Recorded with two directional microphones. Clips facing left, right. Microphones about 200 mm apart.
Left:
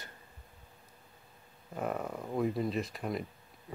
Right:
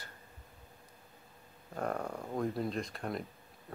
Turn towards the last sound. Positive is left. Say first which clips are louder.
# left 2 dB
turn(degrees=5)  # may be behind; listen again after turning